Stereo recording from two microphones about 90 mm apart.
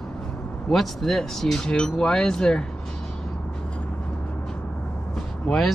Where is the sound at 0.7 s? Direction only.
5° left (ahead or behind).